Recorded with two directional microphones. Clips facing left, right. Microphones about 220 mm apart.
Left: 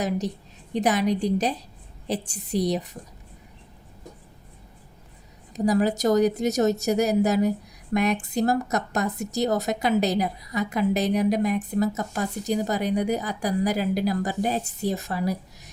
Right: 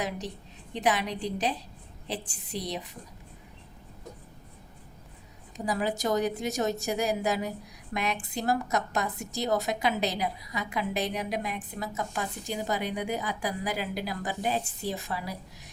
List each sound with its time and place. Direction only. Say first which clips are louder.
0.7 s a woman's voice: left 6 dB; 40° left (ahead or behind)
5.5 s a woman's voice: left 8 dB; 40° left (ahead or behind)